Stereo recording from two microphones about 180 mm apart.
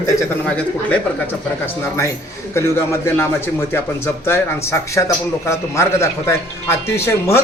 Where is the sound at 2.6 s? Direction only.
15° left (ahead or behind).